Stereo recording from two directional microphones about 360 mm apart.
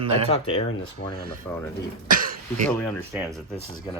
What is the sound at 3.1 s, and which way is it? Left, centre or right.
Speech, centre.